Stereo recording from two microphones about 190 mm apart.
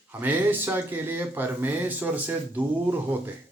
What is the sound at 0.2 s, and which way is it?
Speech, 10° right (ahead or behind).